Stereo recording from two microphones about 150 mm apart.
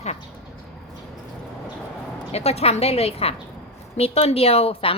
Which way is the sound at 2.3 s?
45° left (ahead or behind).